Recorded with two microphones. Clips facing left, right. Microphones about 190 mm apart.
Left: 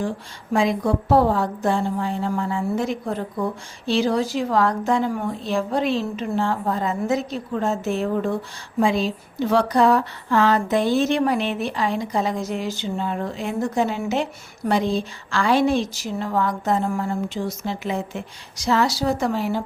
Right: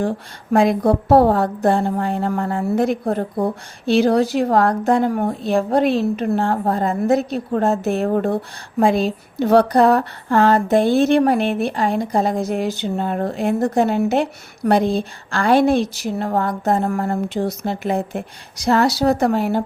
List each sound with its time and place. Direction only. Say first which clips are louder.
0.5 s speech: right 5 dB; 60° right (ahead or behind)